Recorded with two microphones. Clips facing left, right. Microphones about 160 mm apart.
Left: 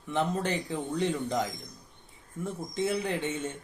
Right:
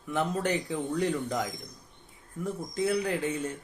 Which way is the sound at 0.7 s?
5° right (ahead or behind).